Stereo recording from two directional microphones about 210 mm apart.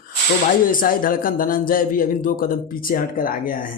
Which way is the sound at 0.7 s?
40° left (ahead or behind).